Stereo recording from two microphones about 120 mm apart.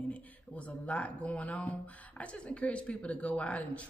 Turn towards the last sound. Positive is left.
turn(degrees=10)  # may be behind; listen again after turning